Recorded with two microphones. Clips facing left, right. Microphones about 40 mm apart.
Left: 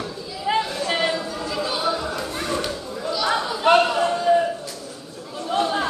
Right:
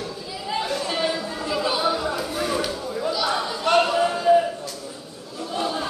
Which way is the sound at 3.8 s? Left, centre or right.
Centre.